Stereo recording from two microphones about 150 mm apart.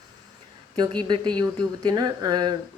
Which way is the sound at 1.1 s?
30° right (ahead or behind).